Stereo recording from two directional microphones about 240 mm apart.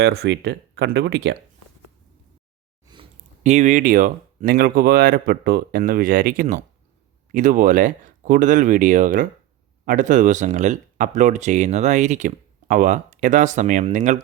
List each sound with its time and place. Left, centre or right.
0.0 s speech: right
2.8 s speech: right